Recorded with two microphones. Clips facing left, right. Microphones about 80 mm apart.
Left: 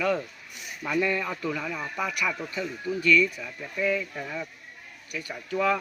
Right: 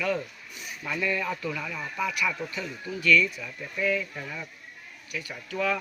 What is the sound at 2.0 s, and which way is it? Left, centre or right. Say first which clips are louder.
A man's voice: right 1 dB; left.